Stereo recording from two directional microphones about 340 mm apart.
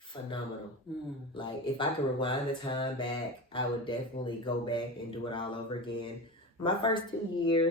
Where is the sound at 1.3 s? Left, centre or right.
Centre.